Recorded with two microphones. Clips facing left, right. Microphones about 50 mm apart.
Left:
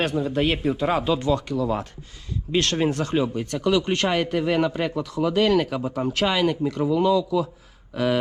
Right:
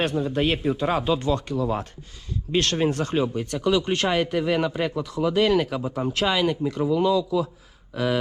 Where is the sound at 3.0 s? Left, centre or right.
Right.